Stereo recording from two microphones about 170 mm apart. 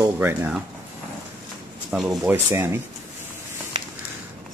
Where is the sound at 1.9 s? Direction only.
Centre (ahead or behind).